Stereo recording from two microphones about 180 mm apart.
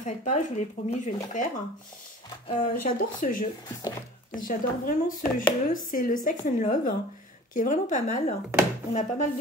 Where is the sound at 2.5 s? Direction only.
50° left (ahead or behind).